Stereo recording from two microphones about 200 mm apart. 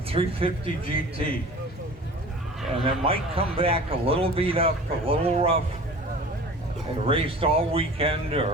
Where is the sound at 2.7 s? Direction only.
30° right (ahead or behind).